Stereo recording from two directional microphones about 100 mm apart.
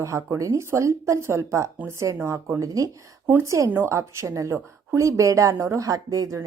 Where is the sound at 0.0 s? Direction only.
30° right (ahead or behind).